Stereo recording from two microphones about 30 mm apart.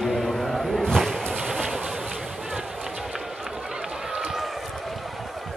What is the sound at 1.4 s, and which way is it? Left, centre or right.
Train, centre.